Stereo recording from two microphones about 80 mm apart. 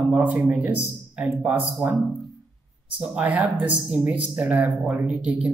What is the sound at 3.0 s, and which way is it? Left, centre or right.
Speech, centre.